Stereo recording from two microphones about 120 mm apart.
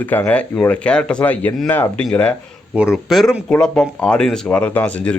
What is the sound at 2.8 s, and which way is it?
Speech, 5° right (ahead or behind).